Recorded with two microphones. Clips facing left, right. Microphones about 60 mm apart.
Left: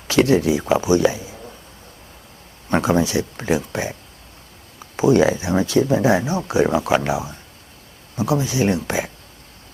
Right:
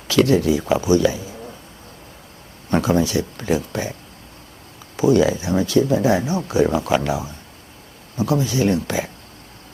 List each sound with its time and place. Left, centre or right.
0.1 s speech: left
2.6 s speech: left
5.1 s speech: left
5.4 s speech: left